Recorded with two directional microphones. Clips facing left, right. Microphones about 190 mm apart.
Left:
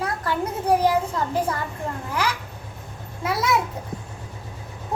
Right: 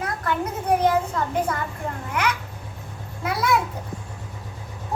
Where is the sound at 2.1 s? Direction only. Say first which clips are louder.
Right 1 dB; 30° left (ahead or behind).